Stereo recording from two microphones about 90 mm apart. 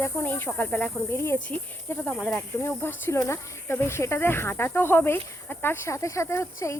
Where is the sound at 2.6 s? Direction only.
25° left (ahead or behind).